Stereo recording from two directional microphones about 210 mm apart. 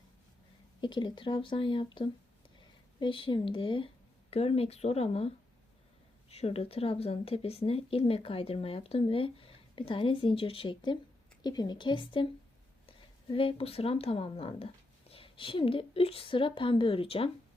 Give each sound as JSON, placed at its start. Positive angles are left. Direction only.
{"t": 0.8, "sound": "speech", "side_deg": 20}
{"t": 3.0, "sound": "speech", "side_deg": 25}
{"t": 6.3, "sound": "speech", "side_deg": 30}
{"t": 13.3, "sound": "speech", "side_deg": 25}